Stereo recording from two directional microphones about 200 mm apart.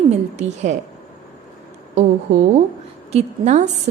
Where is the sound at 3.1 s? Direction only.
35° right (ahead or behind).